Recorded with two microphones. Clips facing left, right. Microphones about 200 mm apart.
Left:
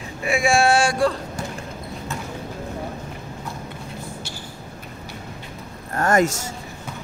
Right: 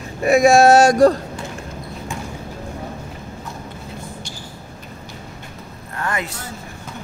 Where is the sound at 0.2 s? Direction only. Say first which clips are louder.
Right 7 dB; 40° right (ahead or behind).